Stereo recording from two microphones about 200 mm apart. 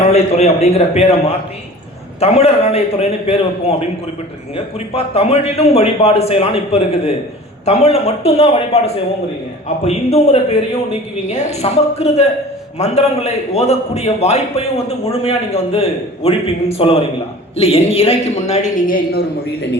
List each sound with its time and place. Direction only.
0.1 s a man's voice: 30° left (ahead or behind)